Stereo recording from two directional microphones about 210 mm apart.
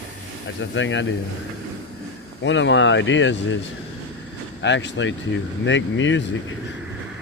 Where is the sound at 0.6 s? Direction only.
60° left (ahead or behind).